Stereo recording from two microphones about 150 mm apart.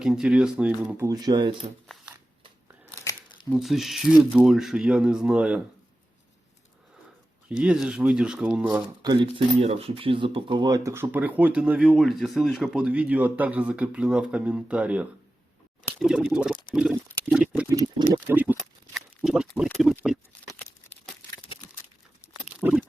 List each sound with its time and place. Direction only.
0.0 s speech: 5° right (ahead or behind)
1.1 s speech: 25° right (ahead or behind)
1.9 s a sound: 5° left (ahead or behind)
2.9 s crumpling: 20° left (ahead or behind)
3.5 s speech: centre (ahead or behind)
7.4 s speech: 5° right (ahead or behind)
9.0 s speech: 30° right (ahead or behind); by 16.6 s 5° right (ahead or behind)
16.7 s pig: 5° right (ahead or behind)
17.7 s a sound: 20° right (ahead or behind)
18.3 s a sound: 10° right (ahead or behind)
22.4 s pig: 10° right (ahead or behind)